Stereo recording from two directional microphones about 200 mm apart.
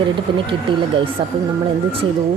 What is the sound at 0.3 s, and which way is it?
Speech, 25° right (ahead or behind).